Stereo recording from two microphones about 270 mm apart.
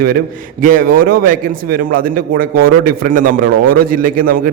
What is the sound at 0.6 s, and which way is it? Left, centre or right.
A man's voice, right.